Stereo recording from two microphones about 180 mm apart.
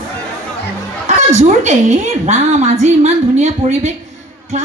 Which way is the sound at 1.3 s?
40° right (ahead or behind).